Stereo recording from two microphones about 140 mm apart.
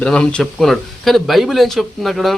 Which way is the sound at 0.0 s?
5° left (ahead or behind).